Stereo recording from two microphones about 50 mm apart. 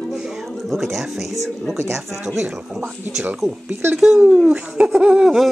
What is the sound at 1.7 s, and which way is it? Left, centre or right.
Speech, right.